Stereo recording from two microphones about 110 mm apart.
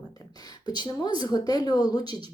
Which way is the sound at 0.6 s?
40° left (ahead or behind).